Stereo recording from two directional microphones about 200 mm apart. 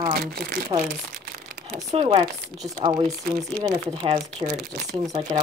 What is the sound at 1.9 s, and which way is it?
A woman's voice, 25° right (ahead or behind).